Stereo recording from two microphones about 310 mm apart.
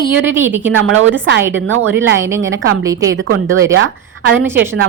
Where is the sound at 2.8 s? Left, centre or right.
Centre.